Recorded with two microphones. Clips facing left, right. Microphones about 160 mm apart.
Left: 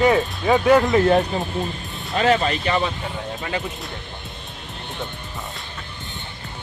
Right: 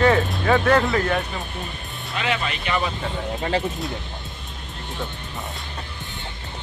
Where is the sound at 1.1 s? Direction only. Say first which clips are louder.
Left 7 dB; 40° left (ahead or behind).